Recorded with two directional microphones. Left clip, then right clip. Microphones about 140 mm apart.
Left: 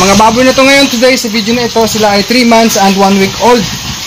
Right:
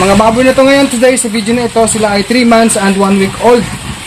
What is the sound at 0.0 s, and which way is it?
Speech, 40° left (ahead or behind).